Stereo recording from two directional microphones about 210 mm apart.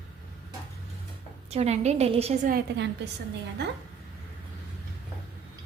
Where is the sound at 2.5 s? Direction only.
55° right (ahead or behind).